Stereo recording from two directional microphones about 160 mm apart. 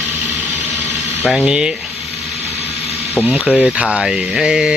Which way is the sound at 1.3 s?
5° right (ahead or behind).